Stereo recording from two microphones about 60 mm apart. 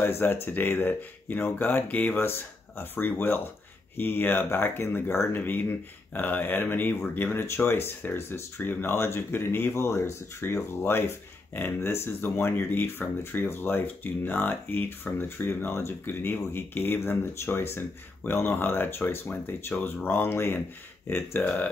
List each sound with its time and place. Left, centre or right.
0.0 s speech: left
9.8 s speech: left
10.4 s speech: left